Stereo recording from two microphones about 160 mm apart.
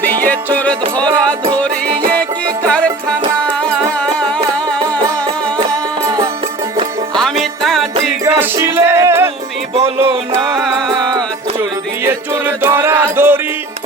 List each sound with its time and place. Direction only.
0.0 s music: 10° left (ahead or behind)
2.6 s music: 5° left (ahead or behind)
4.8 s music: 25° right (ahead or behind)
7.6 s music: centre (ahead or behind)
8.2 s music: 15° right (ahead or behind)
10.6 s music: centre (ahead or behind)
10.8 s music: 25° right (ahead or behind)
12.0 s music: 15° right (ahead or behind)